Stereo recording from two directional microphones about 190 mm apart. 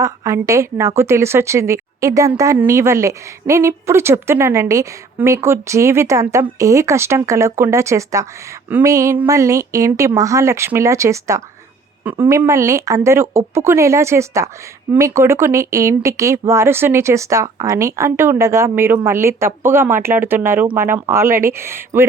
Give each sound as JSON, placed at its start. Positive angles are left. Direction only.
{"t": 0.0, "sound": "a woman's voice", "side_deg": -15}